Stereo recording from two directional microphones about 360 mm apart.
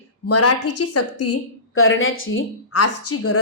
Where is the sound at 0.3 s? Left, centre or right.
Left.